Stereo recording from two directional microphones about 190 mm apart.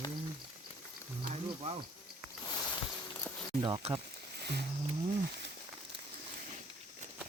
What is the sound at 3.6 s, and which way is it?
Speech, 20° right (ahead or behind).